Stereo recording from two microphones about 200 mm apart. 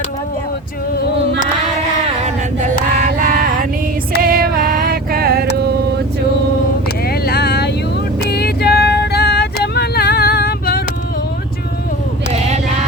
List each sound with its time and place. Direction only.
2.0 s a sound: 35° right (ahead or behind)
3.2 s music: 45° right (ahead or behind)
7.1 s vehicle: 50° left (ahead or behind)